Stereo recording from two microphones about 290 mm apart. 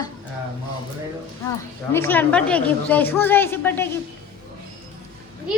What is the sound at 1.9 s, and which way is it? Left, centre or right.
A woman's voice, centre.